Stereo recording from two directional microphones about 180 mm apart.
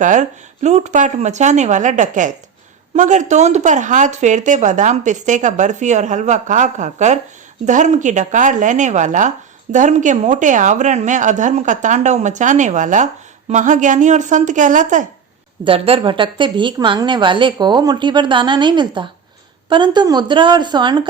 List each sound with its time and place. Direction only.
0.0 s a woman's voice: 45° right (ahead or behind)
15.6 s a woman's voice: 30° right (ahead or behind)